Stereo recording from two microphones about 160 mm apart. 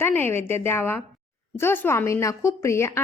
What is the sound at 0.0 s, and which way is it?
A woman's voice, 15° left (ahead or behind).